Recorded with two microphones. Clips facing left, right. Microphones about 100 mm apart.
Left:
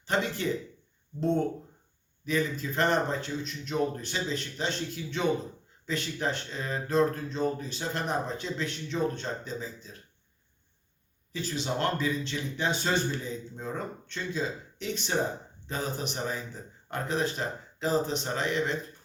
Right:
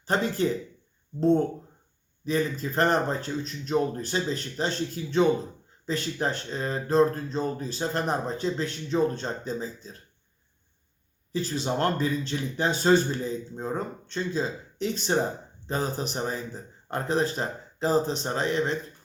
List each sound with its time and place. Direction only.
0.0 s speech: 35° right (ahead or behind)
11.3 s speech: 35° right (ahead or behind)